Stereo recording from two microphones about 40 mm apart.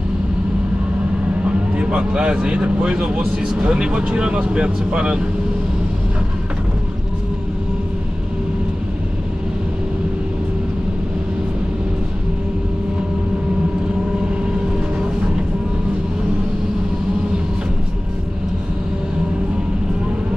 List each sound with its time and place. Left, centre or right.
1.7 s speech: right